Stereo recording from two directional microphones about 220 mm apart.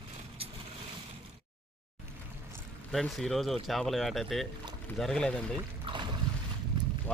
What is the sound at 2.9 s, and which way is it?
Speech, centre (ahead or behind).